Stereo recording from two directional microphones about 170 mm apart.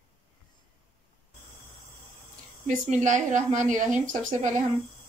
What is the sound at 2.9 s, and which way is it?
A woman's voice, 45° right (ahead or behind).